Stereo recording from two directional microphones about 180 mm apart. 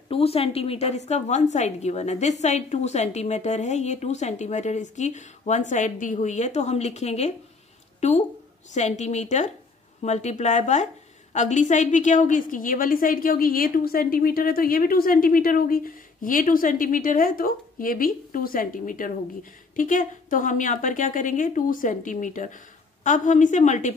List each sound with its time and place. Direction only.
0.1 s a woman's voice: 35° left (ahead or behind)
8.7 s a woman's voice: 40° left (ahead or behind)